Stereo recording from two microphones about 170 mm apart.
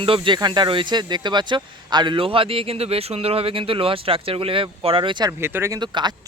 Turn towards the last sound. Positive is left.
turn(degrees=-25)  # may be behind; listen again after turning